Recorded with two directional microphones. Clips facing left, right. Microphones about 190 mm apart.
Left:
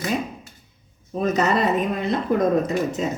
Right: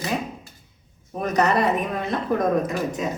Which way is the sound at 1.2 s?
20° left (ahead or behind).